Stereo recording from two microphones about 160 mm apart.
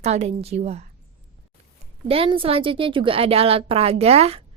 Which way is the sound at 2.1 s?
35° right (ahead or behind).